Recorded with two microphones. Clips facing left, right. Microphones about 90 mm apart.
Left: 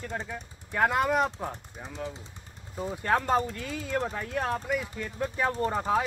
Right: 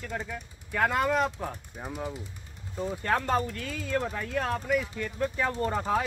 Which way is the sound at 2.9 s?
20° left (ahead or behind).